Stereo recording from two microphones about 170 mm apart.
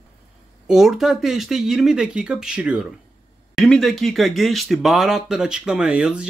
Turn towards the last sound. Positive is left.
turn(degrees=-5)  # may be behind; listen again after turning